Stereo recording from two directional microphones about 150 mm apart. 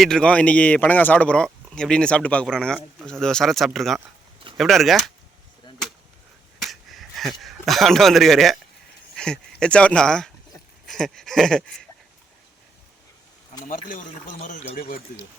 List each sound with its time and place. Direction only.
0.0 s speech: 5° left (ahead or behind)
6.6 s a sound: centre (ahead or behind)
9.6 s speech: 5° left (ahead or behind)
13.7 s speech: 65° left (ahead or behind)